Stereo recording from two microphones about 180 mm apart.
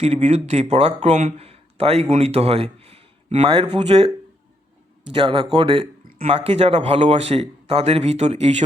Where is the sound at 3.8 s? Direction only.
35° right (ahead or behind).